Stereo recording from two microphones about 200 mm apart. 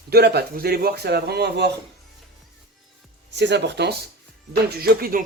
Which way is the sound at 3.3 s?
60° right (ahead or behind).